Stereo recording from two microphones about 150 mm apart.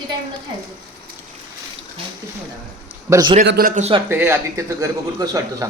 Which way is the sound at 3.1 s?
25° right (ahead or behind).